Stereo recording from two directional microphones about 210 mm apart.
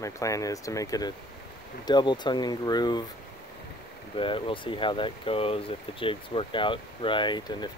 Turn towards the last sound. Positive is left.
turn(degrees=20)  # may be behind; listen again after turning